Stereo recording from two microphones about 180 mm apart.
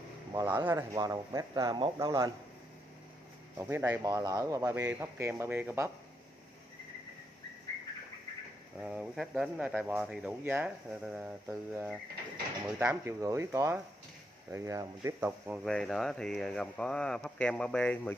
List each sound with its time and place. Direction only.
0.3 s speech: 20° right (ahead or behind)
3.5 s speech: 15° right (ahead or behind)
8.7 s speech: 5° right (ahead or behind)